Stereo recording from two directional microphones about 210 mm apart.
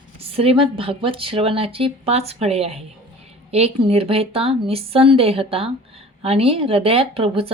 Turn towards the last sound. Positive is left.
turn(degrees=-25)  # may be behind; listen again after turning